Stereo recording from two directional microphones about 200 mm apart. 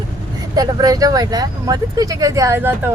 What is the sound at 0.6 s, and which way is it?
Speech, 20° right (ahead or behind).